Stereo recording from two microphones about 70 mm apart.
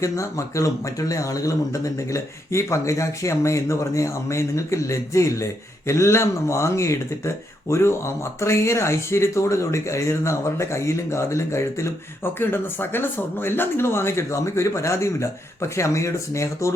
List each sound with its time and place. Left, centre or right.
0.0 s speech: left